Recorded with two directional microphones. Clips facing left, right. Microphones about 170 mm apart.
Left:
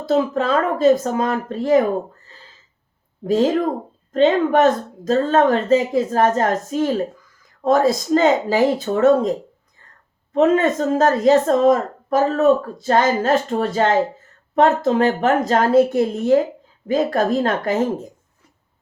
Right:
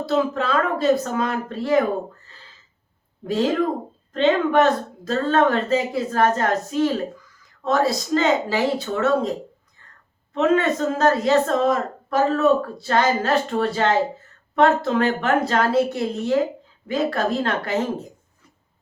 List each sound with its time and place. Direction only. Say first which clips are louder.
0.0 s a woman's voice: left 3 dB; 45° left (ahead or behind)
3.2 s a woman's voice: left 3 dB; 45° left (ahead or behind)
10.3 s a woman's voice: left 3 dB; 45° left (ahead or behind)